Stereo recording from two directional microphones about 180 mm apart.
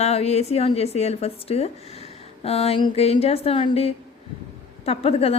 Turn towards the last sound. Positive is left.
turn(degrees=35)  # may be behind; listen again after turning